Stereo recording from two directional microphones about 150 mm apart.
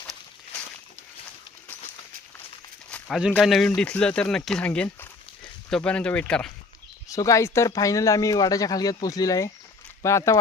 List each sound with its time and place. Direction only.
3.3 s speech: centre (ahead or behind)
7.1 s speech: 20° left (ahead or behind)